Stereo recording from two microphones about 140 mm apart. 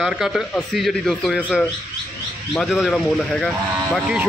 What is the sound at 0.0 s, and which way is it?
Speech, 5° right (ahead or behind).